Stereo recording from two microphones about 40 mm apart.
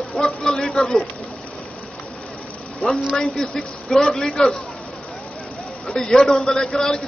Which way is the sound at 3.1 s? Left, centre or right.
Centre.